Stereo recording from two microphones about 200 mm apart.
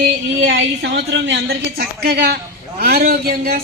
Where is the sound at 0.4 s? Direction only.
65° right (ahead or behind).